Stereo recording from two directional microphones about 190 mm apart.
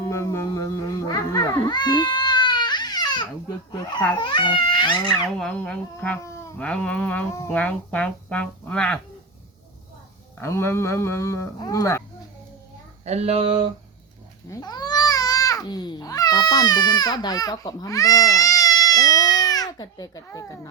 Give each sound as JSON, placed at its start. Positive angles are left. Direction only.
{"t": 0.0, "sound": "music", "side_deg": 15}
{"t": 3.7, "sound": "speech", "side_deg": 25}
{"t": 5.4, "sound": "speech", "side_deg": 5}
{"t": 10.4, "sound": "speech", "side_deg": 15}
{"t": 13.1, "sound": "speech", "side_deg": -35}
{"t": 14.5, "sound": "speech", "side_deg": 20}